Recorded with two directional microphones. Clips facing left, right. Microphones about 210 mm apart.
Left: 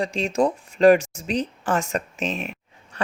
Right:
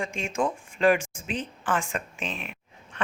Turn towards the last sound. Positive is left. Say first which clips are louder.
# left 4 dB
turn(degrees=40)  # may be behind; listen again after turning